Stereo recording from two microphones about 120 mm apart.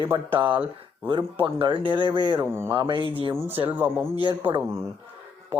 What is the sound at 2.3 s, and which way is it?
Speech, 20° right (ahead or behind).